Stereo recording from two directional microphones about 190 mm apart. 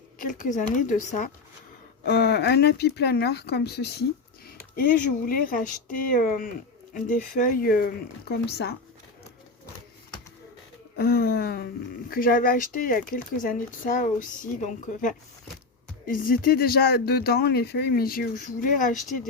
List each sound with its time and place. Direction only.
0.2 s speech: 45° left (ahead or behind)
2.0 s speech: 60° left (ahead or behind)
10.9 s speech: 55° left (ahead or behind)